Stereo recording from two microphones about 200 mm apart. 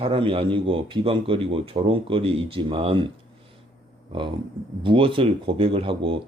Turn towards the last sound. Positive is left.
turn(degrees=-25)  # may be behind; listen again after turning